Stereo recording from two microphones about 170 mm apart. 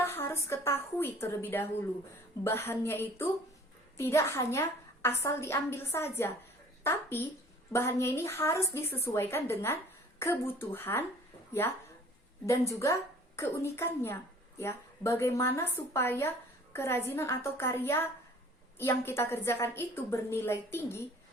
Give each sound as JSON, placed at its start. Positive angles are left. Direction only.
{"t": 0.0, "sound": "a woman's voice", "side_deg": 15}
{"t": 12.5, "sound": "a woman's voice", "side_deg": 20}